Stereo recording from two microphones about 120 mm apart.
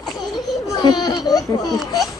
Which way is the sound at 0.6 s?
35° left (ahead or behind).